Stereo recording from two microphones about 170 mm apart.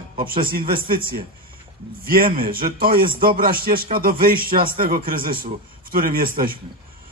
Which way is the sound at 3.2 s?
55° right (ahead or behind).